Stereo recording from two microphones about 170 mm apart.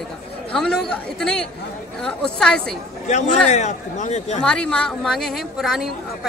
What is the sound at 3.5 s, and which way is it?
Speech, 45° left (ahead or behind).